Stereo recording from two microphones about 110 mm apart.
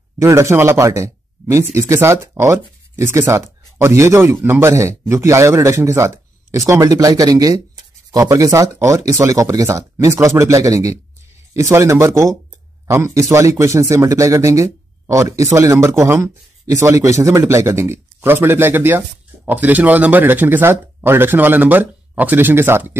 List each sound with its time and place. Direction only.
0.2 s speech: 25° right (ahead or behind)